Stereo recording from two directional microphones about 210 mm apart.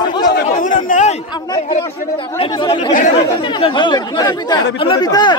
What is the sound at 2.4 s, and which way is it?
Speech, 25° left (ahead or behind).